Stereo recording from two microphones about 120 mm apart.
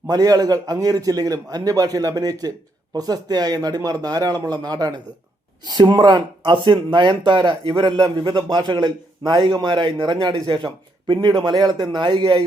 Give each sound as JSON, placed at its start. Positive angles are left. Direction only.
{"t": 0.1, "sound": "speech", "side_deg": -30}